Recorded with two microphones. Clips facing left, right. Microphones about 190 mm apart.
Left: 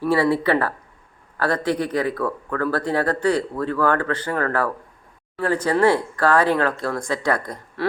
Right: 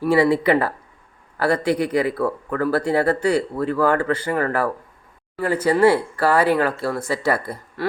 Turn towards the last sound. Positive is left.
turn(degrees=-5)  # may be behind; listen again after turning